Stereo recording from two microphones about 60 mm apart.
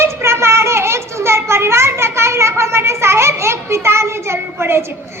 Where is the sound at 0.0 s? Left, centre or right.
Right.